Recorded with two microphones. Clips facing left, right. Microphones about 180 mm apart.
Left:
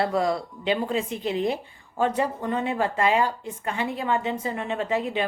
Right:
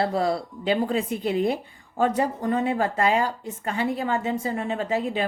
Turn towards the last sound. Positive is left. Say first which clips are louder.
# even
turn(degrees=-35)  # may be behind; listen again after turning